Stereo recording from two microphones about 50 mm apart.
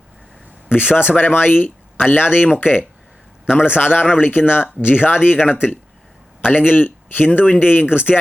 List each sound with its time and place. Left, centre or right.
0.7 s speech: left